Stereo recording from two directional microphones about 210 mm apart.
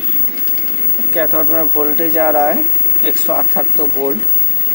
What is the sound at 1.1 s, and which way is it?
Speech, centre (ahead or behind).